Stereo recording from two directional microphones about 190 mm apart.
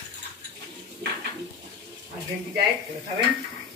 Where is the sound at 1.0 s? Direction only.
60° right (ahead or behind).